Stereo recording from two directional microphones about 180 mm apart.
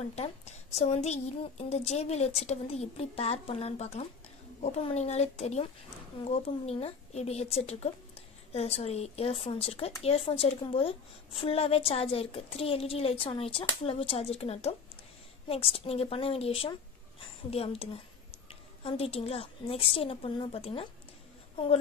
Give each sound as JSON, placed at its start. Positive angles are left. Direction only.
{"t": 0.1, "sound": "a woman's voice", "side_deg": 35}